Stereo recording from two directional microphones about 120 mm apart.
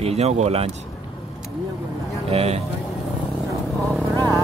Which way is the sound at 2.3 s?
60° right (ahead or behind).